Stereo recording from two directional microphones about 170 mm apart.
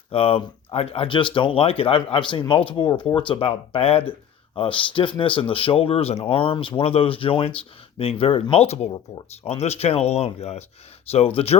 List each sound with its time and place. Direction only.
0.1 s speech: 35° left (ahead or behind)